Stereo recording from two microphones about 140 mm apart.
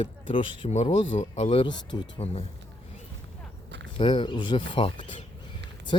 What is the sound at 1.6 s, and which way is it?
Speech, 30° left (ahead or behind).